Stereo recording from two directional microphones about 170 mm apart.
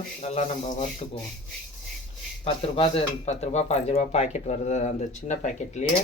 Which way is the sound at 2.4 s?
35° left (ahead or behind).